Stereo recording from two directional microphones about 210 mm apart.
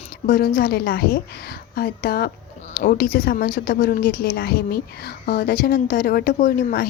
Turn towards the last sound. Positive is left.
turn(degrees=45)  # may be behind; listen again after turning